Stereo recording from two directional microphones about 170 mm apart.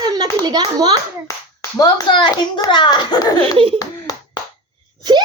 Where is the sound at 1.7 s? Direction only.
25° left (ahead or behind).